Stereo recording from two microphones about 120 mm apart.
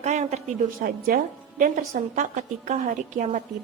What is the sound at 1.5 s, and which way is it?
A woman's voice, 90° right.